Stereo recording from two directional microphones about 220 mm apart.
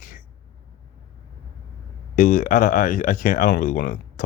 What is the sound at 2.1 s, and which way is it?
Speech, 40° left (ahead or behind).